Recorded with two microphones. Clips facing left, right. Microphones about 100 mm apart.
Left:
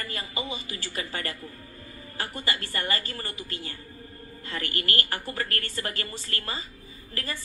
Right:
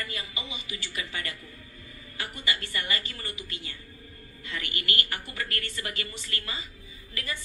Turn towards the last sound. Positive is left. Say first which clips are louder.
# left 2 dB
turn(degrees=40)  # may be behind; listen again after turning